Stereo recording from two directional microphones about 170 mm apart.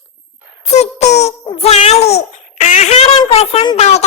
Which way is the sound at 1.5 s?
35° left (ahead or behind).